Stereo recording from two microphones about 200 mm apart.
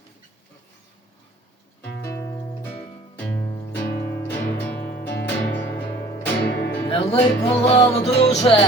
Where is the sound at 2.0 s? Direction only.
15° left (ahead or behind).